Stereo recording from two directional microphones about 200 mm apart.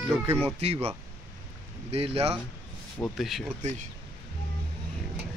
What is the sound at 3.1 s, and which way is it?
Speech, centre (ahead or behind).